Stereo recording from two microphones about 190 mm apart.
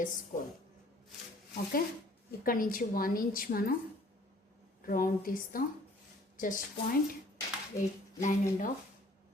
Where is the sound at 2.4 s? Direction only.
45° left (ahead or behind).